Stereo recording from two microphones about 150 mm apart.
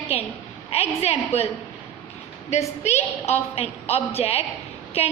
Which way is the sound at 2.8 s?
45° left (ahead or behind).